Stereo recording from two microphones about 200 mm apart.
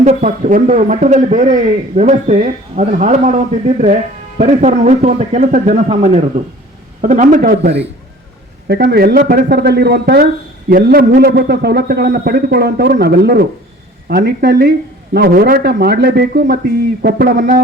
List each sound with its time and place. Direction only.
0.0 s a man's voice: 35° right (ahead or behind)